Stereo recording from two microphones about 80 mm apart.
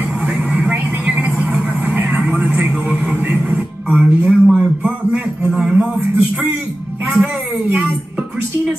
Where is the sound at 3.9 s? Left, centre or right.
Centre.